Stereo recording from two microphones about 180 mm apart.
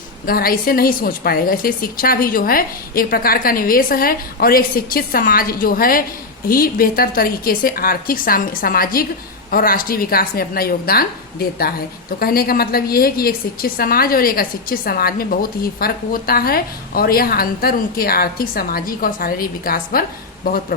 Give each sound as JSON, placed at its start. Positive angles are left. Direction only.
{"t": 0.3, "sound": "a woman's voice", "side_deg": 55}